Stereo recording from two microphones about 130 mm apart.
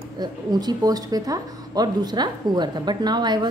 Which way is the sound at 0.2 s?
30° right (ahead or behind).